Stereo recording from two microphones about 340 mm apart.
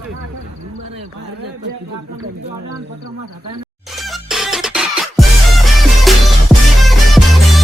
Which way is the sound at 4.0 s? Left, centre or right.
Centre.